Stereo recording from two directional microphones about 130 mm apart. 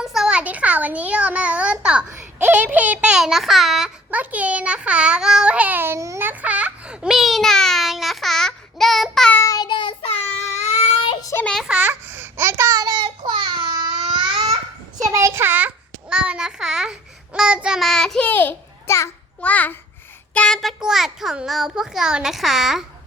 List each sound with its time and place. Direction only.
0.0 s a child's voice: 5° right (ahead or behind)
9.3 s child singing: 25° left (ahead or behind)
10.0 s child singing: 55° left (ahead or behind)
11.2 s child singing: 25° left (ahead or behind)
11.7 s babbling: 15° right (ahead or behind); by 14.5 s 40° right (ahead or behind)
15.1 s a child's voice: 20° right (ahead or behind); by 22.8 s centre (ahead or behind)